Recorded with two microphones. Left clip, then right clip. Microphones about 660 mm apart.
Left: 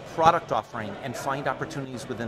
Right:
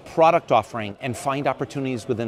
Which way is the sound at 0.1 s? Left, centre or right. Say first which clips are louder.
Right 5 dB; right.